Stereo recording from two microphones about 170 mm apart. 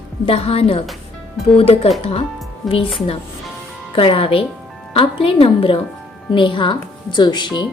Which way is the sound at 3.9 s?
30° left (ahead or behind).